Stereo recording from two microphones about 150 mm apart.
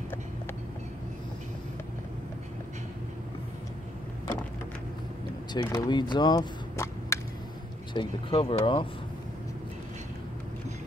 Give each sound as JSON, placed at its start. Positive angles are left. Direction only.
{"t": 5.5, "sound": "speech", "side_deg": 30}
{"t": 5.9, "sound": "a sound", "side_deg": 30}
{"t": 7.9, "sound": "speech", "side_deg": 35}